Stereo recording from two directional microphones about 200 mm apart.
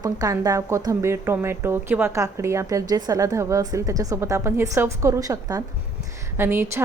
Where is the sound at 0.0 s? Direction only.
20° right (ahead or behind).